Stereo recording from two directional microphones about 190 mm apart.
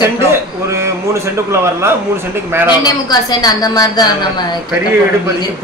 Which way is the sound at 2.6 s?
20° left (ahead or behind).